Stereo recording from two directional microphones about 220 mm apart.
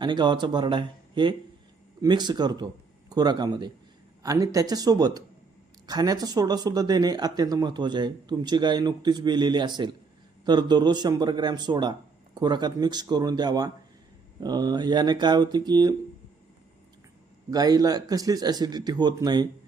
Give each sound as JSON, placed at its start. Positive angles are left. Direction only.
{"t": 0.0, "sound": "a man's voice", "side_deg": -20}
{"t": 17.5, "sound": "a man's voice", "side_deg": -15}